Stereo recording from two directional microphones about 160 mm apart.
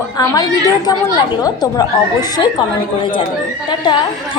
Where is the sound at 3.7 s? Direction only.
30° left (ahead or behind).